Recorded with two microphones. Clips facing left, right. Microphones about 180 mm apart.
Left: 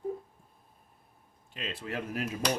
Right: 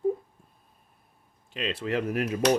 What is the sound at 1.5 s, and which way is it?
Speech, 90° right.